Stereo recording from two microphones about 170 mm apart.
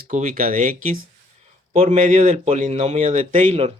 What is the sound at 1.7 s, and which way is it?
Speech, 40° right (ahead or behind).